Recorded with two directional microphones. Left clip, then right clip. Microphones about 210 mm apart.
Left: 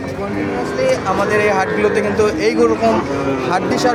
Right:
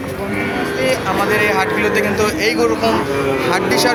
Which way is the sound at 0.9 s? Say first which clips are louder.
Left 1 dB; 55° left (ahead or behind).